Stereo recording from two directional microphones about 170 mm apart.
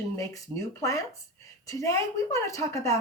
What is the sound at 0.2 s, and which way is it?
Speech, 20° left (ahead or behind).